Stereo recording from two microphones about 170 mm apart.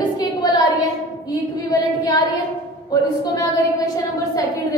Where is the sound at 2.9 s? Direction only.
25° left (ahead or behind).